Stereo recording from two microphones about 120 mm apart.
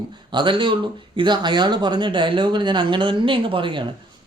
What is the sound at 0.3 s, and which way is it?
Speech, 40° right (ahead or behind).